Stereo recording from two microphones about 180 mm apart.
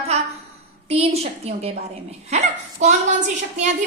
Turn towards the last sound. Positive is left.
turn(degrees=-40)  # may be behind; listen again after turning